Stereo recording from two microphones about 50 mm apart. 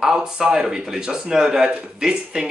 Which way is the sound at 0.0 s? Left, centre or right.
Centre.